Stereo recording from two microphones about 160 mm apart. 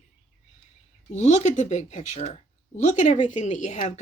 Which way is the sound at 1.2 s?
45° left (ahead or behind).